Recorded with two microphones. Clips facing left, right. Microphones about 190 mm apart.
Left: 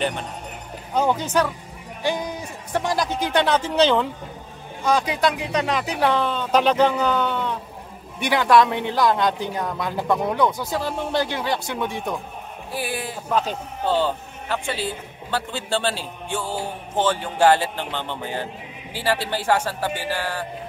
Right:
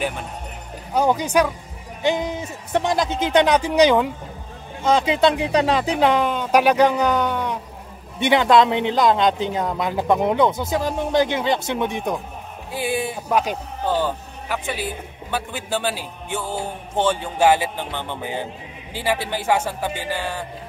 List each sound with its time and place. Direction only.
0.9 s speech: 10° right (ahead or behind)
2.0 s speech: 20° right (ahead or behind)
4.8 s speech: 25° right (ahead or behind)
5.9 s speech: 15° right (ahead or behind)